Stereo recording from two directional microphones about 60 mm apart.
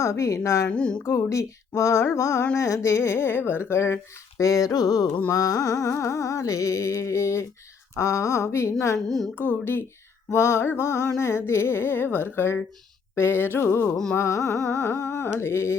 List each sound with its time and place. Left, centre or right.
0.0 s a woman's voice: left
0.4 s a sound: left
0.7 s a sound: centre
1.0 s carnatic music: left
2.6 s music: left
4.4 s a sound: left
5.3 s carnatic music: left
9.0 s speech: centre
9.4 s music: left
10.3 s music: left
14.2 s music: left